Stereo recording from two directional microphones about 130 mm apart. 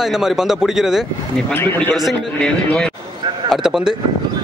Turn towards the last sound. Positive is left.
turn(degrees=0)  # may be behind; listen again after turning